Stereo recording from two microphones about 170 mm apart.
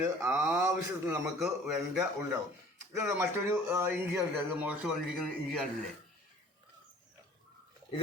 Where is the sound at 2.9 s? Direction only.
15° right (ahead or behind).